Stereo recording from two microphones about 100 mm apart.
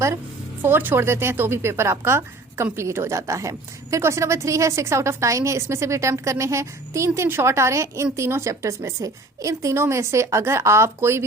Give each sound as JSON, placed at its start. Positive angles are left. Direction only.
{"t": 0.6, "sound": "a woman's voice", "side_deg": -20}